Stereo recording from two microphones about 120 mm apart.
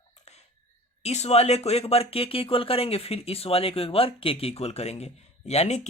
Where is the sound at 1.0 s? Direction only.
65° left (ahead or behind).